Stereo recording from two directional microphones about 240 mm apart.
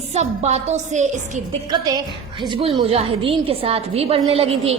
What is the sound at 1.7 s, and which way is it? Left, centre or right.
Speech, centre.